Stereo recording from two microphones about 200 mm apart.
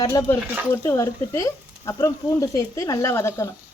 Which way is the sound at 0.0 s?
15° left (ahead or behind).